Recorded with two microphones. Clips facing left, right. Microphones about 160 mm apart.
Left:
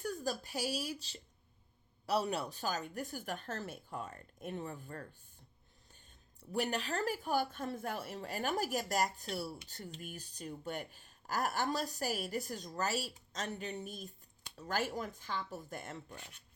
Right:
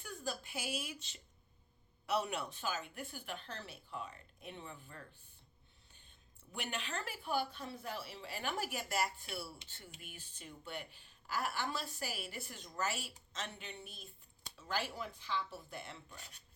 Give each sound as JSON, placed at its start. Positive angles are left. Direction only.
{"t": 0.0, "sound": "a woman's voice", "side_deg": 40}
{"t": 6.5, "sound": "speech", "side_deg": 40}